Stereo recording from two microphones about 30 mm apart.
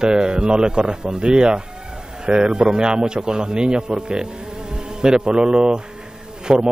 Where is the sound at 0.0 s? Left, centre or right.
Right.